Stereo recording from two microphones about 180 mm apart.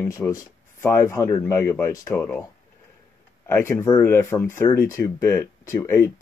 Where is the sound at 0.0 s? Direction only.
15° left (ahead or behind).